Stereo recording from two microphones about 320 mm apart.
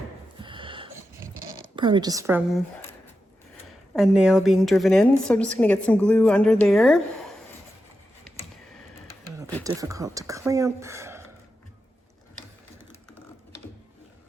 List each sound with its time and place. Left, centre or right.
0.4 s a sound: centre
1.7 s speech: centre
3.9 s a woman's voice: centre
9.6 s speech: centre
12.9 s typing: centre